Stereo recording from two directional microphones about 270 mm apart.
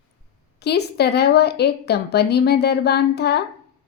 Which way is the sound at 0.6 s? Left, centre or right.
Left.